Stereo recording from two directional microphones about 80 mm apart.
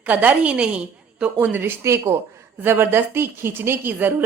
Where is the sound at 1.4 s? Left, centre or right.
Right.